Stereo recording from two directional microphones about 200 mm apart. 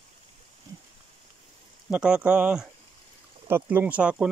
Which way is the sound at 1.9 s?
5° right (ahead or behind).